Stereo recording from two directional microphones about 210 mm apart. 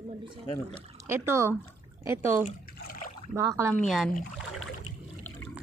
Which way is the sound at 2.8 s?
45° left (ahead or behind).